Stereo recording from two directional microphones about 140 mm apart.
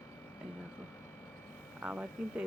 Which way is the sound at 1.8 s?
10° right (ahead or behind).